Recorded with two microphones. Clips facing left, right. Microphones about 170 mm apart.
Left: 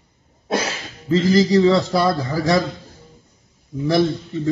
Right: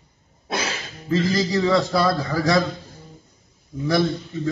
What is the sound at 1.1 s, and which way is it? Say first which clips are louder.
A man's voice: left 6 dB; 25° left (ahead or behind).